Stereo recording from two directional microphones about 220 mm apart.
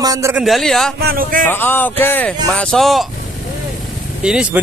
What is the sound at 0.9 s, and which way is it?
Speech, 45° right (ahead or behind).